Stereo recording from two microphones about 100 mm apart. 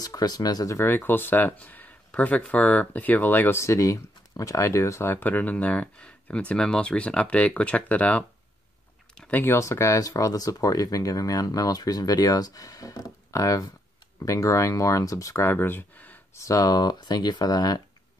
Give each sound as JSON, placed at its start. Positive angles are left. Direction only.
{"t": 0.0, "sound": "speech", "side_deg": 40}
{"t": 0.7, "sound": "speech", "side_deg": 20}
{"t": 16.3, "sound": "speech", "side_deg": 35}